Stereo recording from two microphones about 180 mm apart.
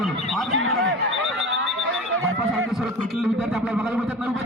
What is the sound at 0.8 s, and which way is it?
Alarm, 90° right.